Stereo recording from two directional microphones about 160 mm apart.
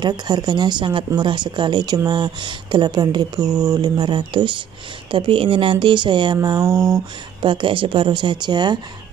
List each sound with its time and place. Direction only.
0.0 s speech: 25° right (ahead or behind)